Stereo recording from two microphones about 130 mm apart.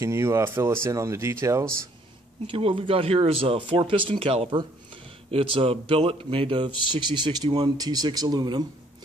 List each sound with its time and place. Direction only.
0.0 s speech: 20° right (ahead or behind)
2.4 s speech: 45° right (ahead or behind)